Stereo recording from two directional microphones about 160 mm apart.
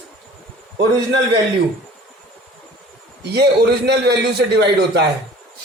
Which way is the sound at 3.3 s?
90° right.